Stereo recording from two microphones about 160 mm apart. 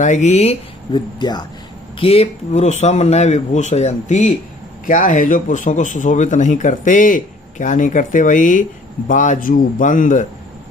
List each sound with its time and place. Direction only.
0.0 s a man's voice: 50° left (ahead or behind)
0.9 s speech: 25° left (ahead or behind)
2.0 s a man's voice: 35° left (ahead or behind)
4.9 s a man's voice: 55° left (ahead or behind)